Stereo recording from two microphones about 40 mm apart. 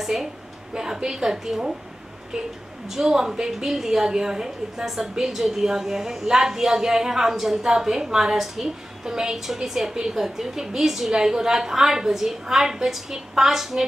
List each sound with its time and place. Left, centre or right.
0.0 s a woman's voice: centre